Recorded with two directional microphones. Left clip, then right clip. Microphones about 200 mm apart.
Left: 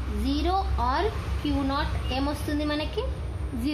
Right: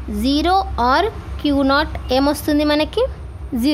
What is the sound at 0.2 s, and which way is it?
A woman's voice, 55° right (ahead or behind).